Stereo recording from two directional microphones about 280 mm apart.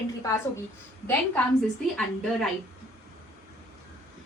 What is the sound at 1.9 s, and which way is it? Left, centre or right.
Speech, centre.